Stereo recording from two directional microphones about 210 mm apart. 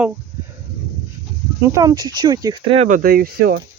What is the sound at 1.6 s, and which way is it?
Speech, 15° right (ahead or behind).